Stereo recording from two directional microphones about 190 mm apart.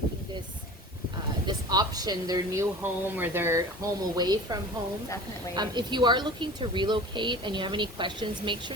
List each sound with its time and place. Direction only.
1.5 s a woman's voice: 20° right (ahead or behind)
5.5 s a woman's voice: 25° right (ahead or behind)